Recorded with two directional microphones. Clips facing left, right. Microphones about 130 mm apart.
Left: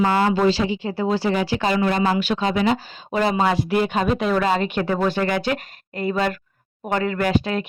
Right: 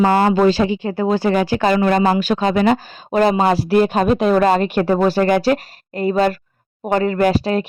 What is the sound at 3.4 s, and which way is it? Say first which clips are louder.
Speech: right 5 dB; 40° right (ahead or behind).